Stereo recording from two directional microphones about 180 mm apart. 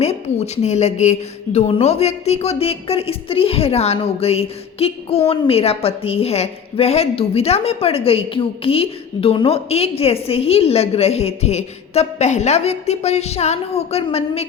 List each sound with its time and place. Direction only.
0.0 s a woman's voice: 35° left (ahead or behind)